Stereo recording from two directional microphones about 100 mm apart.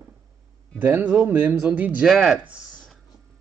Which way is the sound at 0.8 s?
20° right (ahead or behind).